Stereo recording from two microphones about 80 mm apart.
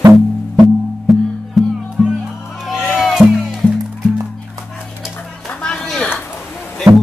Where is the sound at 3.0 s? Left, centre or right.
Centre.